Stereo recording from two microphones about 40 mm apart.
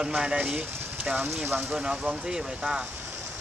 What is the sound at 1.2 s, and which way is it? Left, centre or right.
Speech, right.